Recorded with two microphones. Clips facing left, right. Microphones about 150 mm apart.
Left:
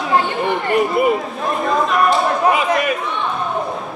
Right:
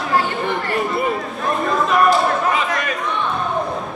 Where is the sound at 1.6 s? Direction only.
Centre (ahead or behind).